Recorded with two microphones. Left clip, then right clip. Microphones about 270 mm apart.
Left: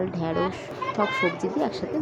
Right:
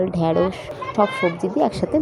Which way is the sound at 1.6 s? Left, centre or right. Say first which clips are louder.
Right 11 dB; centre.